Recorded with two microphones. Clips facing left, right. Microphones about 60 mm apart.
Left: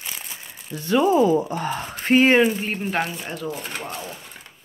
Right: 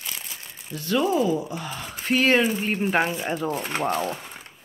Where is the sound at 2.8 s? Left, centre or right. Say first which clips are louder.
Right 2 dB; centre.